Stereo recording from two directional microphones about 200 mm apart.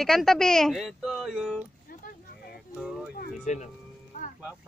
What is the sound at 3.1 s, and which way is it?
Music, 45° left (ahead or behind).